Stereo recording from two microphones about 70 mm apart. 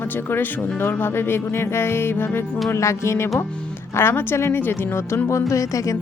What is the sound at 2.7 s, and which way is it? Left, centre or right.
Speech, left.